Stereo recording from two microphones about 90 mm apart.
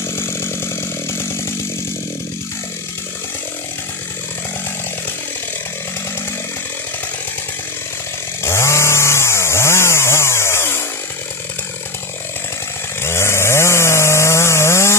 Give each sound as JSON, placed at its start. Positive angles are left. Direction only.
{"t": 0.0, "sound": "chainsaw", "side_deg": 25}
{"t": 8.5, "sound": "chainsaw", "side_deg": 30}
{"t": 13.0, "sound": "chainsaw", "side_deg": 30}